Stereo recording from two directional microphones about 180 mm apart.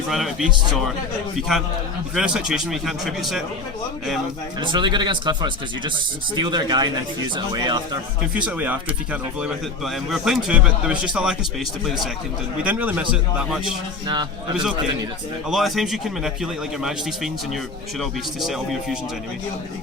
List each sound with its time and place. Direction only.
0.1 s speech: centre (ahead or behind)
4.6 s speech: 25° right (ahead or behind)
8.4 s speech: 10° right (ahead or behind)
12.6 s speech: 10° right (ahead or behind)
14.5 s speech: 5° right (ahead or behind)
18.0 s speech: centre (ahead or behind)